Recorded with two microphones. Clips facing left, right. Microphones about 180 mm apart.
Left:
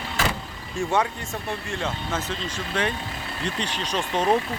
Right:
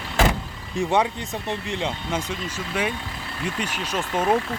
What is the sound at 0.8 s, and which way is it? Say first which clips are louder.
Speech: right 2 dB; 15° right (ahead or behind).